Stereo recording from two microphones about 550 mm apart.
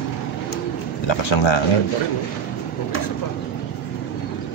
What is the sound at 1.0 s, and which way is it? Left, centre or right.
Speech, left.